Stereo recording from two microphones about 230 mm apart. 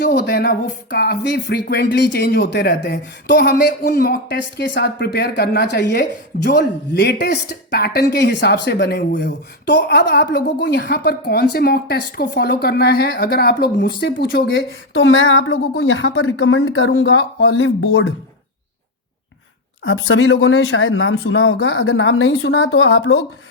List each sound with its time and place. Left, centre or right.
0.0 s speech: left
19.8 s speech: left